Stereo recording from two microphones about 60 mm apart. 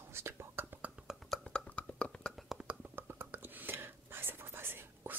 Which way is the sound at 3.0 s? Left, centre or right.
Right.